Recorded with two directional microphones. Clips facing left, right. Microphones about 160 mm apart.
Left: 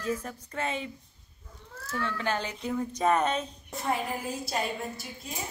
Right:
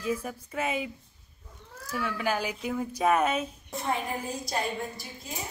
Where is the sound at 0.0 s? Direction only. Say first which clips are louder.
Right 1 dB; 10° right (ahead or behind).